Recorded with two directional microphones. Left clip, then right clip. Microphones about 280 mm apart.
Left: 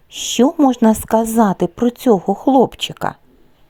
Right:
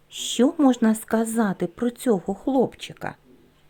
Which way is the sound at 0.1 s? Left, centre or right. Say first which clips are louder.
Left 7 dB; centre.